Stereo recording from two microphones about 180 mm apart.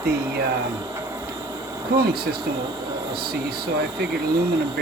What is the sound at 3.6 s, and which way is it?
Speech, 65° right (ahead or behind).